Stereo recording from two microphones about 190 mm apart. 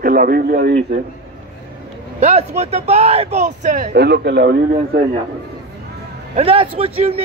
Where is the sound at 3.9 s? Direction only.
60° right (ahead or behind).